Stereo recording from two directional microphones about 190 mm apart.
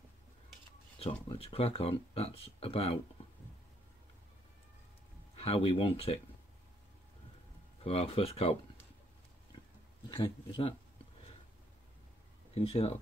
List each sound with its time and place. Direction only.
1.3 s speech: 30° left (ahead or behind)
5.3 s speech: 30° left (ahead or behind)
7.8 s speech: 30° left (ahead or behind)
10.0 s speech: 25° left (ahead or behind)
12.5 s speech: 30° left (ahead or behind)